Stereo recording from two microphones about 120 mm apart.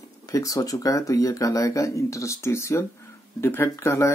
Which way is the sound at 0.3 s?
30° left (ahead or behind).